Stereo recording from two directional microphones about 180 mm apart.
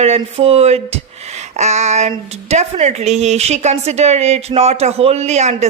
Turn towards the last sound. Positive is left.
turn(degrees=-40)  # may be behind; listen again after turning